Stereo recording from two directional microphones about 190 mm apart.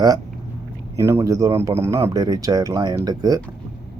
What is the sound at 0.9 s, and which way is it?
Speech, 15° right (ahead or behind).